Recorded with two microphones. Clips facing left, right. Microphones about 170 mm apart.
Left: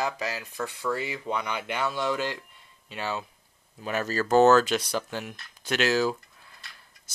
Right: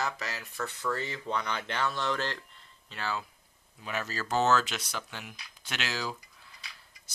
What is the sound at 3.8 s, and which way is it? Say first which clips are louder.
Speech: left 7 dB; 45° left (ahead or behind).